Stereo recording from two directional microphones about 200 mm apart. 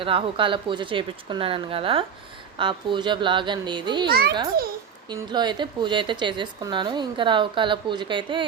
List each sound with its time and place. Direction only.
0.0 s a woman's voice: 25° right (ahead or behind)
4.1 s a child's voice: 50° right (ahead or behind)
5.0 s a woman's voice: 20° right (ahead or behind)